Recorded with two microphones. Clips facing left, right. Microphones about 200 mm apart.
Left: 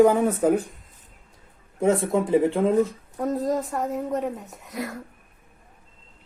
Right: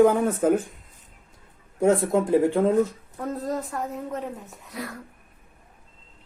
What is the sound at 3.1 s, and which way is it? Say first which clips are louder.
Speech: left 5 dB; 20° left (ahead or behind).